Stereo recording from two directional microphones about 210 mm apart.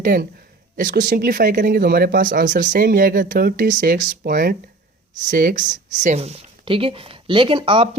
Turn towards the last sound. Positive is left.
turn(degrees=-25)  # may be behind; listen again after turning